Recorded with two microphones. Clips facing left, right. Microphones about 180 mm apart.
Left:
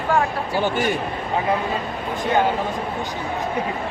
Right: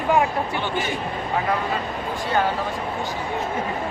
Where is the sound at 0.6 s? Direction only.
45° left (ahead or behind).